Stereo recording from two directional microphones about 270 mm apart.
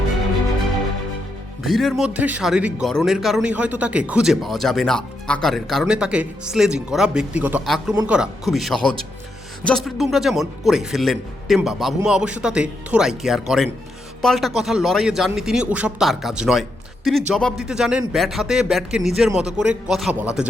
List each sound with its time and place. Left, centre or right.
1.6 s speech: centre